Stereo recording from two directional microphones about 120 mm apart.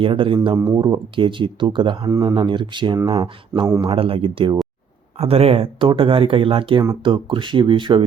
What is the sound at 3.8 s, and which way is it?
Speech, 50° right (ahead or behind).